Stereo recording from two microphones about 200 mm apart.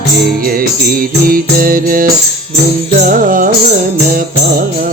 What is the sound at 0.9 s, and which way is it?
Music, 45° right (ahead or behind).